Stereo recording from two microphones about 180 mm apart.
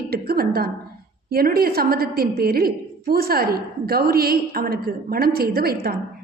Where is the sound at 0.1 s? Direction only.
55° right (ahead or behind).